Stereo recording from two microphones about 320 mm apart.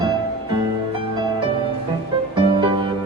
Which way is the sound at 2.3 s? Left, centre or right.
Centre.